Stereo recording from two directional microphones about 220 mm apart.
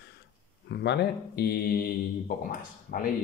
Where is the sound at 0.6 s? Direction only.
50° left (ahead or behind).